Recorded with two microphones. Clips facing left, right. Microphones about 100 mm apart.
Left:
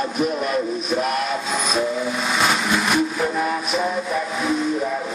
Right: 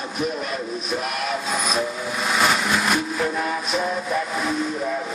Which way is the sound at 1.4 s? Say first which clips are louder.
Left 2 dB; centre (ahead or behind).